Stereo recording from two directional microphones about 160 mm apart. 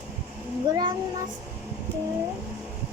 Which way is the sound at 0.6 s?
25° right (ahead or behind).